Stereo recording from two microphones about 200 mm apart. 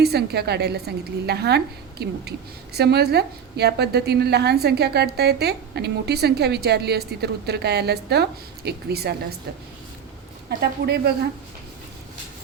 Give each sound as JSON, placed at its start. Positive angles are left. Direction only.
{"t": 0.0, "sound": "a woman's voice", "side_deg": -55}
{"t": 10.6, "sound": "a woman's voice", "side_deg": -55}